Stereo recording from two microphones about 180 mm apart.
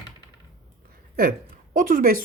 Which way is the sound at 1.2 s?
55° right (ahead or behind).